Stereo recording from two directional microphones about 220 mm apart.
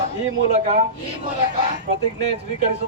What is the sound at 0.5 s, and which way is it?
Speech, 30° right (ahead or behind).